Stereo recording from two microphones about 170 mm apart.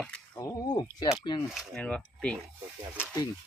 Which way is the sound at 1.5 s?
Centre (ahead or behind).